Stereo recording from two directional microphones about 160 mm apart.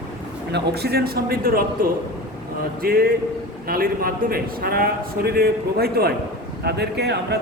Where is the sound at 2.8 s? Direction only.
70° right (ahead or behind).